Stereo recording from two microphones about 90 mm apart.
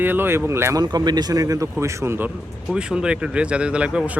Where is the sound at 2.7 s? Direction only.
10° right (ahead or behind).